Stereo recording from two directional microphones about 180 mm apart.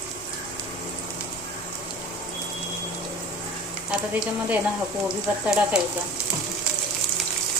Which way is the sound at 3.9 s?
5° right (ahead or behind).